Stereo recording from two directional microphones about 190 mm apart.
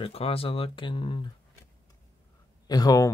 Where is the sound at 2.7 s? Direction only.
20° left (ahead or behind).